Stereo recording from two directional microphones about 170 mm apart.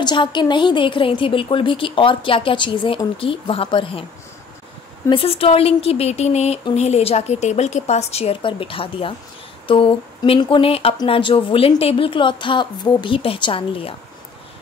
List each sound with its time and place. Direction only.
0.0 s a woman's voice: 25° left (ahead or behind)
5.1 s speech: 35° left (ahead or behind)